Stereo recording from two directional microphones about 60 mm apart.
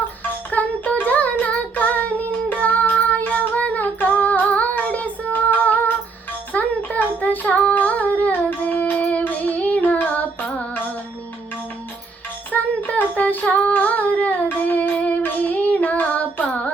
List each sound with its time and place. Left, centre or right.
0.5 s child singing: left
3.2 s female singing: left
6.5 s child singing: left
7.8 s humming: left
12.5 s a sound: left
13.7 s child singing: left
14.6 s music: left